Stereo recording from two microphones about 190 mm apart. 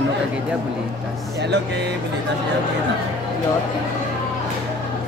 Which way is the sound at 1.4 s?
65° right (ahead or behind).